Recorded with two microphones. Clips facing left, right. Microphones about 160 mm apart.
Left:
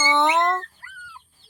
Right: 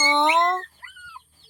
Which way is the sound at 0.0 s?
20° right (ahead or behind).